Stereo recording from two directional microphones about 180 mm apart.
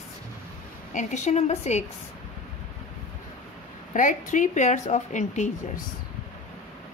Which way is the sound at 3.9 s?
45° left (ahead or behind).